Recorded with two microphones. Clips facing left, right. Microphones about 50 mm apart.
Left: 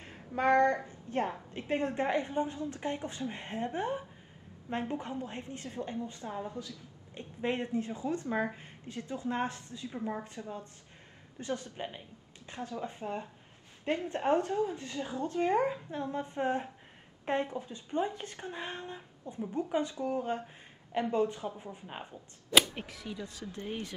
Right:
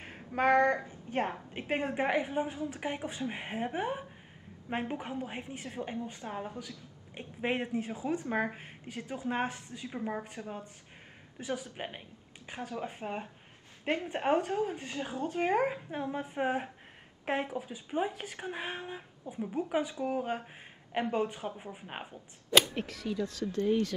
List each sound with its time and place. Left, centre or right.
0.0 s a woman's voice: right; by 11.6 s centre
11.7 s a woman's voice: right
15.2 s a woman's voice: right
20.9 s a woman's voice: right
22.1 s speech: centre; by 23.9 s left